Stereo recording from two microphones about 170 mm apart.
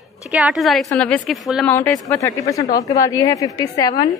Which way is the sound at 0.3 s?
5° right (ahead or behind).